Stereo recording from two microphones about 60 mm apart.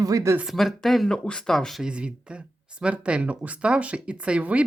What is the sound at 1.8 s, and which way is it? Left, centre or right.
Speech, centre.